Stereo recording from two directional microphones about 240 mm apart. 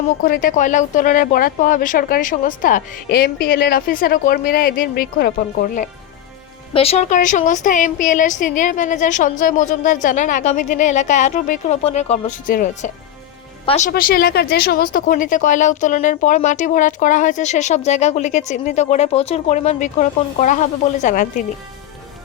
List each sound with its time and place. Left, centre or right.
0.2 s speech: left
13.9 s speech: left